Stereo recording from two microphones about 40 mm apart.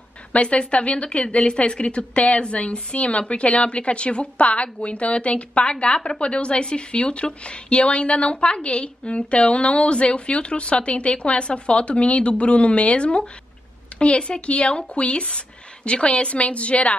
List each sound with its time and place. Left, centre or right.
0.3 s a woman's voice: left